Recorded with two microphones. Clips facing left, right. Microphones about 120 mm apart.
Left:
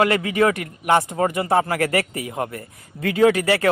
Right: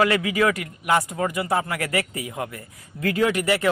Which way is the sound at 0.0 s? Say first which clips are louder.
Left 2 dB; 35° left (ahead or behind).